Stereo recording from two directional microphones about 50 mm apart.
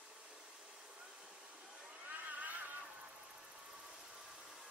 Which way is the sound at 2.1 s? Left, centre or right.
Right.